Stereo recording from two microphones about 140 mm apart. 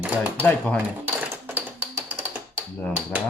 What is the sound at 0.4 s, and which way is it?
Speech, 10° left (ahead or behind).